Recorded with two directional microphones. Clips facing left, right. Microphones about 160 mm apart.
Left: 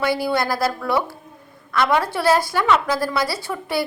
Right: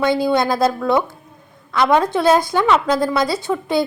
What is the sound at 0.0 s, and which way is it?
Speech, 20° right (ahead or behind).